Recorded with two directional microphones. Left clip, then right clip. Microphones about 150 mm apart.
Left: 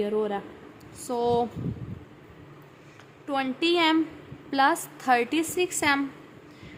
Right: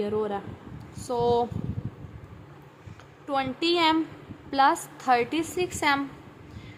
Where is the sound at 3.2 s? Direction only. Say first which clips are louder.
Even; 5° left (ahead or behind).